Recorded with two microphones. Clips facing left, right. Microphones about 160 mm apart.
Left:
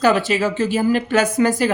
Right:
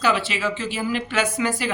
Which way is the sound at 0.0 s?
45° left (ahead or behind).